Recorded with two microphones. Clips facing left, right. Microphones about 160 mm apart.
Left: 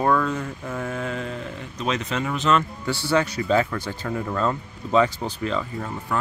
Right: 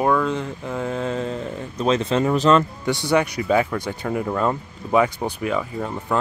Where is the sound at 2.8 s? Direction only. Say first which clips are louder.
Right 3 dB; 15° right (ahead or behind).